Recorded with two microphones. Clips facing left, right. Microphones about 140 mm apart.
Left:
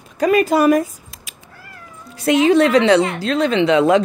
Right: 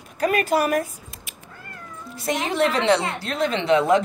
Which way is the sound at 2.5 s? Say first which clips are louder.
Left 6 dB; 90° left.